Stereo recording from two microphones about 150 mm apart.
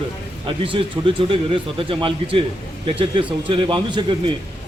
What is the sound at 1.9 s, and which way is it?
A man's voice, 35° right (ahead or behind).